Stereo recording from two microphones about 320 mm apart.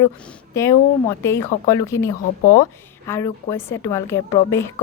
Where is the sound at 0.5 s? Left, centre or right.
Centre.